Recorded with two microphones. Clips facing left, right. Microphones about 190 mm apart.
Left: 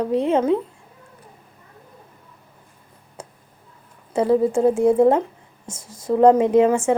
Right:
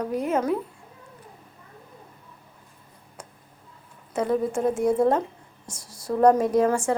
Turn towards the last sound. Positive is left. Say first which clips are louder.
# left 5 dB
turn(degrees=20)  # may be behind; listen again after turning